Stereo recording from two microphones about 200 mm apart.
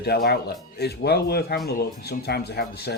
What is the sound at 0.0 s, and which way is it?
Speech, 55° left (ahead or behind).